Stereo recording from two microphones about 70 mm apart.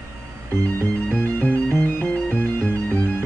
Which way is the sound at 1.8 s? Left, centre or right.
Left.